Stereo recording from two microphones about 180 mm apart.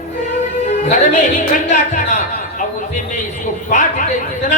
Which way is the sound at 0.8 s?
40° left (ahead or behind).